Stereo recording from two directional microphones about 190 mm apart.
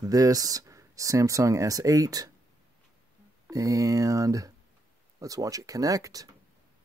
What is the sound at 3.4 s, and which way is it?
Speech, 15° right (ahead or behind).